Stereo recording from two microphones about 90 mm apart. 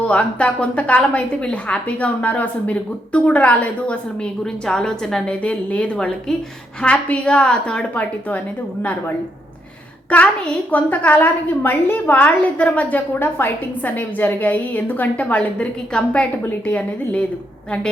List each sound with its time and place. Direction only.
0.0 s a woman's voice: 15° left (ahead or behind)